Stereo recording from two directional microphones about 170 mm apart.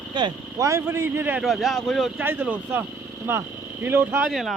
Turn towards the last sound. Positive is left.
turn(degrees=0)  # may be behind; listen again after turning